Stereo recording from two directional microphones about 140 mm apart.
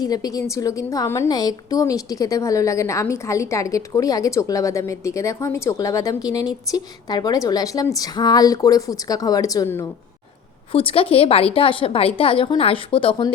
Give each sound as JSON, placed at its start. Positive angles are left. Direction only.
{"t": 0.0, "sound": "a woman's voice", "side_deg": 25}
{"t": 10.7, "sound": "a woman's voice", "side_deg": 40}